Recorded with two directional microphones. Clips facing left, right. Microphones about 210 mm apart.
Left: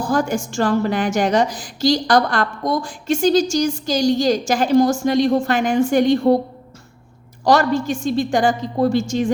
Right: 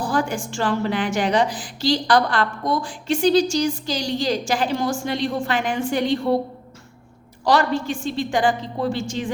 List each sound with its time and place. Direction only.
0.0 s a woman's voice: 45° left (ahead or behind)
7.4 s a woman's voice: 45° left (ahead or behind)